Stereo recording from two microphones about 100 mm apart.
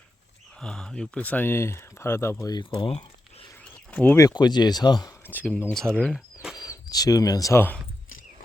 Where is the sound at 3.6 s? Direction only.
10° left (ahead or behind).